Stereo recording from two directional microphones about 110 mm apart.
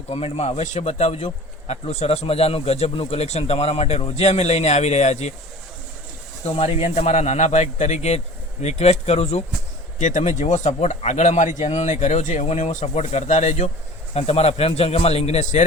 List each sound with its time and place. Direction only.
0.1 s a man's voice: 65° left (ahead or behind); by 5.3 s 90° left
6.4 s a man's voice: 70° left (ahead or behind)
10.2 s speech: 90° left
14.1 s a man's voice: 65° left (ahead or behind); by 15.6 s 80° left